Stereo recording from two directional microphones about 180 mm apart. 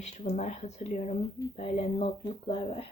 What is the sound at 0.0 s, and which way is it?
Speech, 40° left (ahead or behind).